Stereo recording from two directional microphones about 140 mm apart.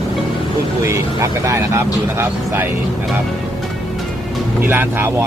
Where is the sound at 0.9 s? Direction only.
20° right (ahead or behind).